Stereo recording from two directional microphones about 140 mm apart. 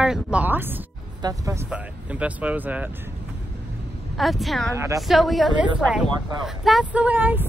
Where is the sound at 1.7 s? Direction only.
10° right (ahead or behind).